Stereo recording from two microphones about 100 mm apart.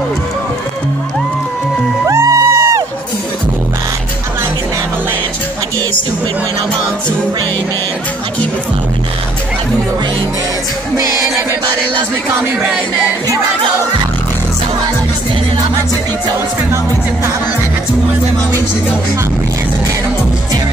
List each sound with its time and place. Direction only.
2.0 s music: 30° right (ahead or behind)
11.0 s music: 35° right (ahead or behind)